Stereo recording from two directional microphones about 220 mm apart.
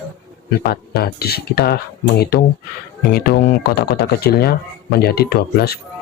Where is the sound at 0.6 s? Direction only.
45° left (ahead or behind).